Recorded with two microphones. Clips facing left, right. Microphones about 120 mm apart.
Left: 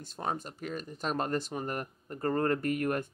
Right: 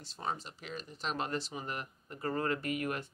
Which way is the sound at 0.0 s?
50° left (ahead or behind).